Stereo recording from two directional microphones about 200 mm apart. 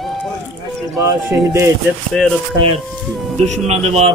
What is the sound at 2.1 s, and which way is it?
Speech, 5° left (ahead or behind).